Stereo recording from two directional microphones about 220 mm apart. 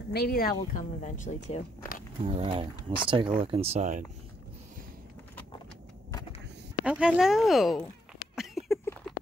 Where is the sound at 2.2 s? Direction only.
25° right (ahead or behind).